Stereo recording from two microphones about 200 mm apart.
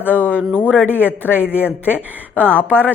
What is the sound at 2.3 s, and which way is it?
Speech, 10° left (ahead or behind).